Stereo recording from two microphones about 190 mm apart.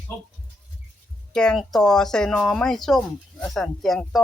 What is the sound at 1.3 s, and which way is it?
Speech, centre (ahead or behind).